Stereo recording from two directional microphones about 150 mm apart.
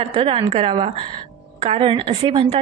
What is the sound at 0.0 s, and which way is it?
A woman's voice, 35° right (ahead or behind).